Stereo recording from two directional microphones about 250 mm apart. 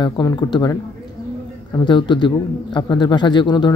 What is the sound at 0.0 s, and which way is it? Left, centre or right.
Speech, centre.